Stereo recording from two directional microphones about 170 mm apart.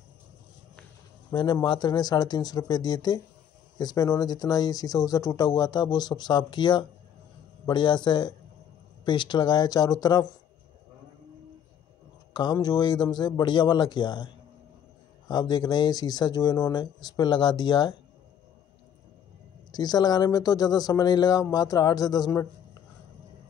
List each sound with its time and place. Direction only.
1.3 s speech: 25° left (ahead or behind)
12.4 s speech: 25° left (ahead or behind)
19.7 s speech: 25° left (ahead or behind)